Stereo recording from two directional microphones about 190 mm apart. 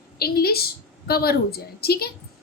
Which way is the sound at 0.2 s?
55° left (ahead or behind).